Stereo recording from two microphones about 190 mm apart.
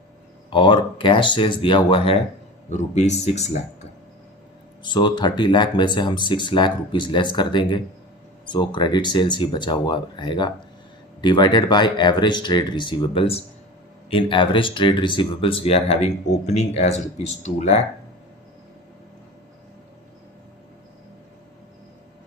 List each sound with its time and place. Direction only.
0.5 s speech: 25° left (ahead or behind)
4.8 s speech: 25° left (ahead or behind)